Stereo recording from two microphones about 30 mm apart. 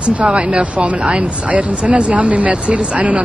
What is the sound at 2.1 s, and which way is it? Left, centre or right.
Speech, right.